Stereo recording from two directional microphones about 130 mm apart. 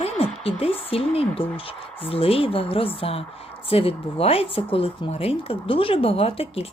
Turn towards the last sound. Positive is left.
turn(degrees=50)  # may be behind; listen again after turning